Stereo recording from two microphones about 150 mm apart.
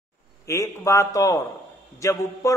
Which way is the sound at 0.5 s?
20° left (ahead or behind).